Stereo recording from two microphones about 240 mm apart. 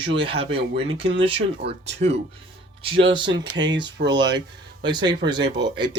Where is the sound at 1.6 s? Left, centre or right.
Right.